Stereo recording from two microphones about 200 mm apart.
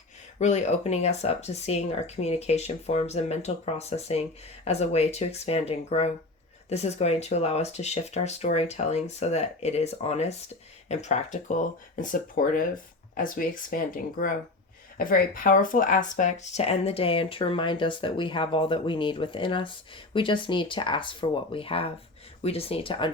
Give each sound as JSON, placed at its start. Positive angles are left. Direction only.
{"t": 0.3, "sound": "speech", "side_deg": 35}